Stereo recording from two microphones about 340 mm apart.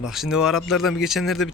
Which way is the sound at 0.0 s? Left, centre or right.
Centre.